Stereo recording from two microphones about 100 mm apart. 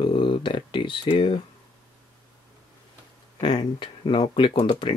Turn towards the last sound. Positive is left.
turn(degrees=60)  # may be behind; listen again after turning